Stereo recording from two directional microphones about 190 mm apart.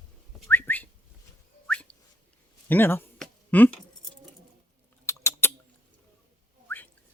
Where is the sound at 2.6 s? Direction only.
10° left (ahead or behind).